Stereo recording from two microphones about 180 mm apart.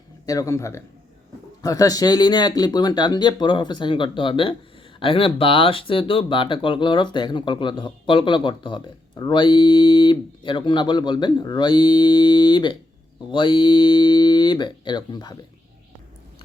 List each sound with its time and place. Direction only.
0.3 s speech: 20° left (ahead or behind)